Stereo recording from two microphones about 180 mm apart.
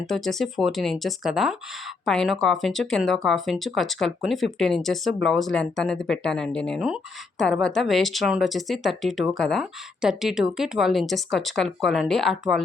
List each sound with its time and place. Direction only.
0.0 s speech: centre (ahead or behind)